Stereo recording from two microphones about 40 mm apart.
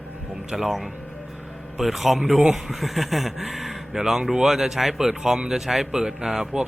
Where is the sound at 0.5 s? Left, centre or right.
Centre.